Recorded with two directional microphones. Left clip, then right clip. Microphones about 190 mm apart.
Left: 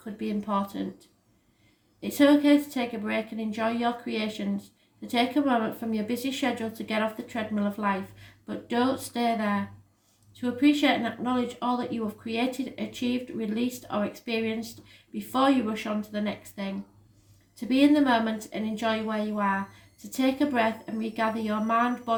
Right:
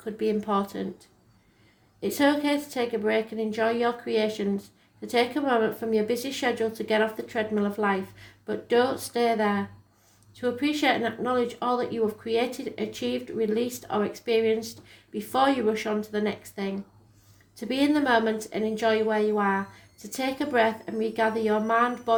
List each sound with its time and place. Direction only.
0.0 s speech: 35° right (ahead or behind)